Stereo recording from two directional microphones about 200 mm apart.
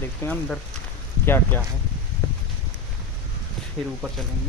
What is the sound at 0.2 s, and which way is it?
Speech, 5° left (ahead or behind).